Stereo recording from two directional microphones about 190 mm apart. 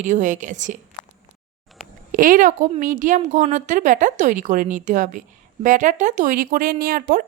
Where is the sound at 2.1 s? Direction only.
45° right (ahead or behind).